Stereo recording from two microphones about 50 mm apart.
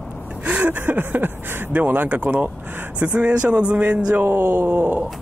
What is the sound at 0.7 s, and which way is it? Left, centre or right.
Speech, right.